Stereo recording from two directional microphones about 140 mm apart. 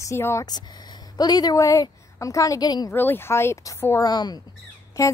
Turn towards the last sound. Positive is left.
turn(degrees=20)  # may be behind; listen again after turning